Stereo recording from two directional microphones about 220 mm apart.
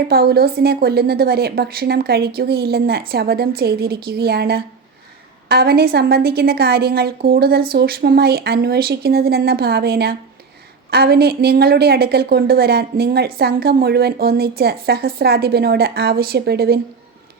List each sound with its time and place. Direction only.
0.1 s a woman's voice: 45° right (ahead or behind)